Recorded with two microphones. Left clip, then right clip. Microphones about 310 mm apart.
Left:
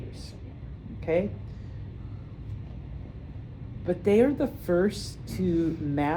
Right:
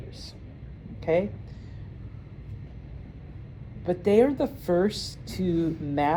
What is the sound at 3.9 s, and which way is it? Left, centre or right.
A woman's voice, right.